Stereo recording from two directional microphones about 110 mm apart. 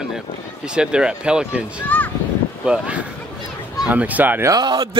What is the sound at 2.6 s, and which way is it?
Speech, 10° right (ahead or behind).